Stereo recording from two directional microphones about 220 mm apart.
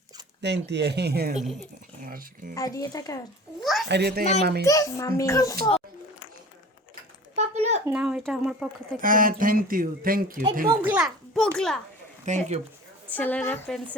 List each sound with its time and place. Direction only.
0.4 s speech: 50° right (ahead or behind)
1.4 s speech: centre (ahead or behind)
2.6 s a child's voice: 15° left (ahead or behind)
3.6 s speech: centre (ahead or behind)
3.8 s speech: 50° right (ahead or behind)
4.6 s a child's voice: 15° left (ahead or behind)
7.3 s a sound: 30° right (ahead or behind)
7.9 s speech: 5° right (ahead or behind)
9.0 s speech: 40° right (ahead or behind)
10.8 s a child's voice: 5° right (ahead or behind)
12.3 s speech: 30° right (ahead or behind)
13.1 s a child's voice: 10° left (ahead or behind)